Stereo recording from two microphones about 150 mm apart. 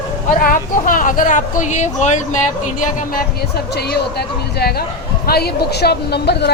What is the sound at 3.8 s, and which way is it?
Speech, 90° left.